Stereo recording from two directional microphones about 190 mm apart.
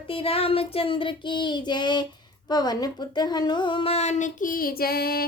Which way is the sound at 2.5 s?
20° left (ahead or behind).